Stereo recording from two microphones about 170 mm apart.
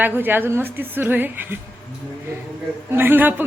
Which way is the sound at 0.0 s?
10° right (ahead or behind).